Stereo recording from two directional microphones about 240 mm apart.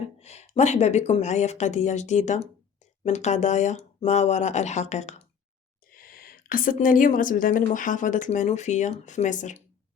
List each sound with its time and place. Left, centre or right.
0.0 s a woman's voice: left